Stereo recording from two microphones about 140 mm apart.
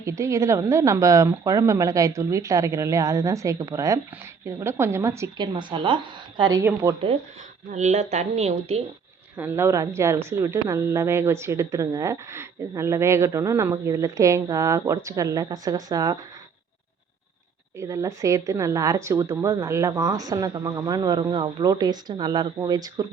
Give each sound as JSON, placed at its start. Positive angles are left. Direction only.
{"t": 0.0, "sound": "a woman's voice", "side_deg": -20}
{"t": 5.4, "sound": "a woman's voice", "side_deg": -35}
{"t": 6.6, "sound": "a woman's voice", "side_deg": -20}
{"t": 7.7, "sound": "a woman's voice", "side_deg": -60}
{"t": 9.4, "sound": "a woman's voice", "side_deg": -15}
{"t": 17.7, "sound": "a woman's voice", "side_deg": -20}